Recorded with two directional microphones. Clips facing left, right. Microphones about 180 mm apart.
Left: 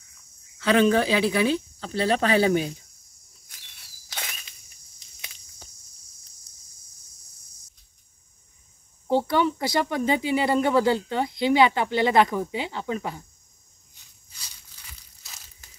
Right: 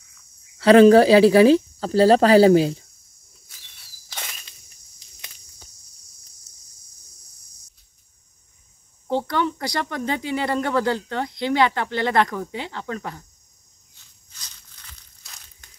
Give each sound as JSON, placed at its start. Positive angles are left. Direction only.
{"t": 0.6, "sound": "speech", "side_deg": -35}
{"t": 9.0, "sound": "speech", "side_deg": 5}
{"t": 13.9, "sound": "crushing", "side_deg": 10}